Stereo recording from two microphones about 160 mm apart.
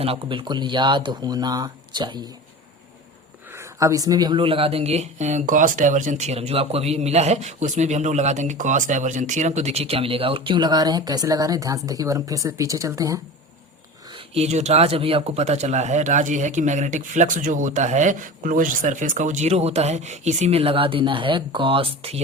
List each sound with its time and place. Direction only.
0.0 s speech: 35° right (ahead or behind)
3.5 s speech: 20° right (ahead or behind)
14.3 s speech: 45° right (ahead or behind)